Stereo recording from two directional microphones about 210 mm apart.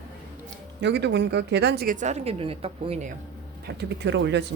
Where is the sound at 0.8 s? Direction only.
55° right (ahead or behind); by 3.1 s 30° right (ahead or behind).